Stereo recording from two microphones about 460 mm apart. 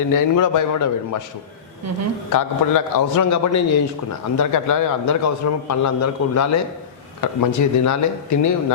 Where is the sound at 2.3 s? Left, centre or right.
Left.